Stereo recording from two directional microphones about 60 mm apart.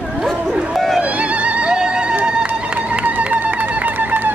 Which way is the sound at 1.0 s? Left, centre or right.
Right.